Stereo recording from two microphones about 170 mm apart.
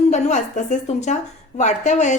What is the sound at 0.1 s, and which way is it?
A woman's voice, 45° left (ahead or behind).